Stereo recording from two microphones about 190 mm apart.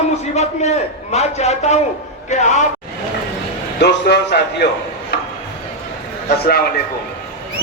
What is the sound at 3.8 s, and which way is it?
Speech, 65° left (ahead or behind).